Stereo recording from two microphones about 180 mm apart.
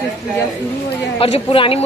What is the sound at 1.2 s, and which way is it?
Speech, 30° left (ahead or behind).